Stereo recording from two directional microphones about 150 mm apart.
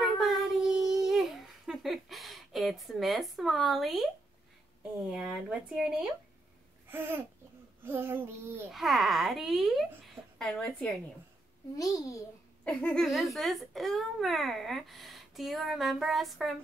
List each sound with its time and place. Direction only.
0.0 s child singing: centre (ahead or behind)
5.1 s a child's voice: 5° right (ahead or behind)
6.9 s child singing: 15° right (ahead or behind)
8.7 s a child's voice: centre (ahead or behind)
11.8 s a child's voice: 25° left (ahead or behind)
12.6 s a child's voice: 5° left (ahead or behind)